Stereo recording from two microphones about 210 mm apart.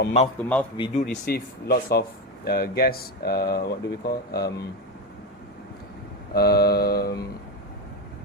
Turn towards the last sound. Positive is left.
turn(degrees=45)  # may be behind; listen again after turning